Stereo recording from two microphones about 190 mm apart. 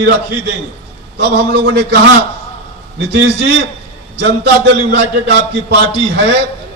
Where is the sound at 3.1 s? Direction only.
60° right (ahead or behind).